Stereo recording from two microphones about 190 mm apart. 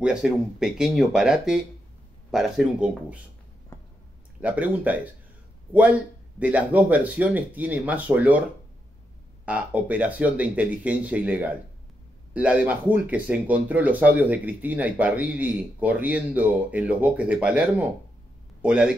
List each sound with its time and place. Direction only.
0.0 s speech: 5° right (ahead or behind)
3.7 s squish: 15° left (ahead or behind)
4.4 s speech: 5° right (ahead or behind)
9.5 s a man's voice: 5° right (ahead or behind)